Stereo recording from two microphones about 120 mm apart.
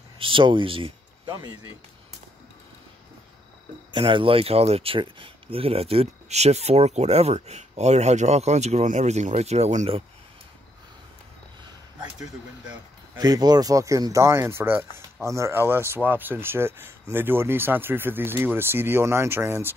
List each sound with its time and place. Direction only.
0.2 s speech: 45° right (ahead or behind)
3.9 s speech: 45° right (ahead or behind); by 9.8 s 70° right (ahead or behind)
13.2 s speech: 35° right (ahead or behind)